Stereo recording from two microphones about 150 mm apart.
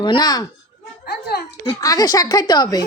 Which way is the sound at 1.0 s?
90° left.